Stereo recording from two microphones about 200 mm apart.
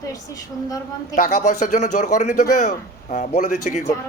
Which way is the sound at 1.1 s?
40° left (ahead or behind).